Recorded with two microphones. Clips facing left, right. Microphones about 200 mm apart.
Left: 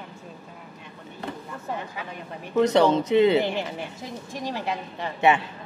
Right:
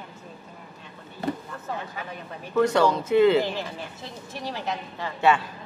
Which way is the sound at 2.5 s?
20° left (ahead or behind).